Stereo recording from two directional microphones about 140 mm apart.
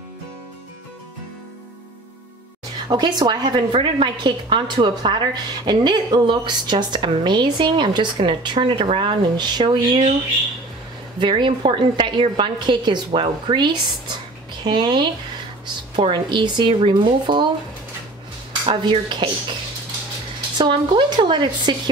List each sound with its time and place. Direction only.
2.9 s a woman's voice: 30° right (ahead or behind)
11.1 s a woman's voice: 35° right (ahead or behind)
18.7 s a woman's voice: 35° right (ahead or behind)
20.5 s a woman's voice: 35° right (ahead or behind)